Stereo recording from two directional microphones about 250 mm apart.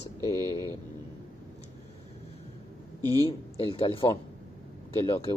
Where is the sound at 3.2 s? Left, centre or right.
Left.